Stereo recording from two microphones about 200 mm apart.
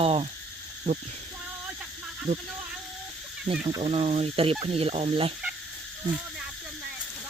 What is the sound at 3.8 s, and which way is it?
Speech, 35° right (ahead or behind).